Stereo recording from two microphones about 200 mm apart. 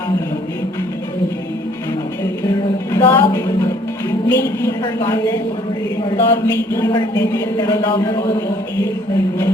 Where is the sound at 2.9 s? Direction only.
15° left (ahead or behind).